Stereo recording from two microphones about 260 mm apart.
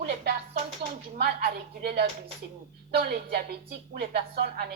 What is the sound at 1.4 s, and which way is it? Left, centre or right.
A woman's voice, right.